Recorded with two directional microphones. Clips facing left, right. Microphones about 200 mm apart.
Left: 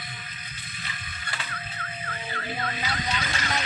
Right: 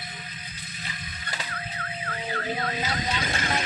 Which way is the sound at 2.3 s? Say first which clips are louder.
Right 3 dB; 40° right (ahead or behind).